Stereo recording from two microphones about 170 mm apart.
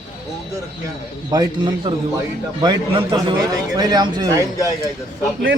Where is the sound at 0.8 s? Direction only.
20° right (ahead or behind).